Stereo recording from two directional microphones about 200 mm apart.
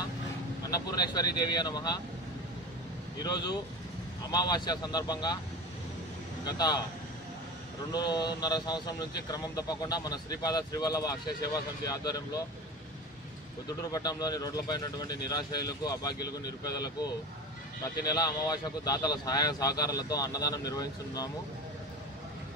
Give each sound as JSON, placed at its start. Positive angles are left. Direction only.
{"t": 0.7, "sound": "speech", "side_deg": 20}
{"t": 3.2, "sound": "speech", "side_deg": 20}
{"t": 6.4, "sound": "speech", "side_deg": 20}
{"t": 7.9, "sound": "speech", "side_deg": 20}
{"t": 13.9, "sound": "speech", "side_deg": 20}